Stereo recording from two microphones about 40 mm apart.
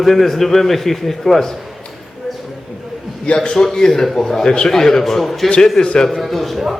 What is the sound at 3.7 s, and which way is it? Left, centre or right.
Speech, centre.